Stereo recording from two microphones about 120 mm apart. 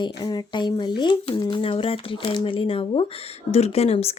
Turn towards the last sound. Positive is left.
turn(degrees=60)  # may be behind; listen again after turning